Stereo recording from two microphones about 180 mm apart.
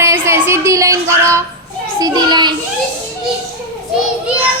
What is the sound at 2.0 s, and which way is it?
Children playing, 20° right (ahead or behind).